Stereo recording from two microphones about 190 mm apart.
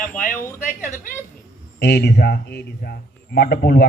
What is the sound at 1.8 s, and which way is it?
A man's voice, 60° left (ahead or behind).